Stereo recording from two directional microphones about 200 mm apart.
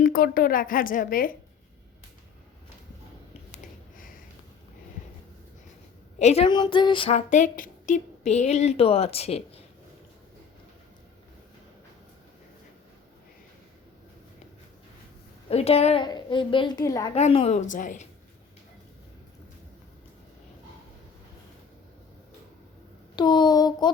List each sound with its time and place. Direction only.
0.0 s a woman's voice: 45° left (ahead or behind)
3.5 s a sound: 45° left (ahead or behind)
6.1 s a woman's voice: 30° left (ahead or behind)
7.3 s a woman's voice: 40° left (ahead or behind)
15.4 s a woman's voice: 30° left (ahead or behind)
17.2 s a woman's voice: 30° left (ahead or behind)
23.1 s a woman's voice: 20° left (ahead or behind)